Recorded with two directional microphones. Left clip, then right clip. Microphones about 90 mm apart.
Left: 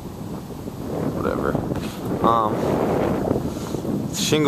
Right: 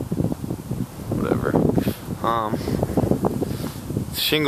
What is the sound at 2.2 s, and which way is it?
Speech, 15° left (ahead or behind).